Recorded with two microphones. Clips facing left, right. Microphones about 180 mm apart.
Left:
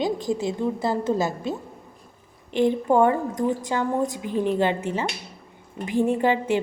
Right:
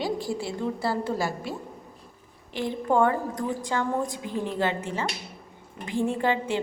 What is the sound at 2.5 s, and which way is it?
A woman's voice, 20° left (ahead or behind).